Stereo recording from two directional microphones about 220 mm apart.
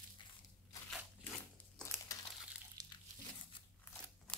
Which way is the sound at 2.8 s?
15° right (ahead or behind).